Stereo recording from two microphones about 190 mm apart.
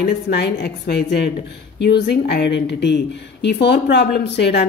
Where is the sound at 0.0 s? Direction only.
55° left (ahead or behind).